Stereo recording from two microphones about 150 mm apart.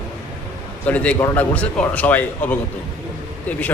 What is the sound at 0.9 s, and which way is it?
A man's voice, 10° left (ahead or behind).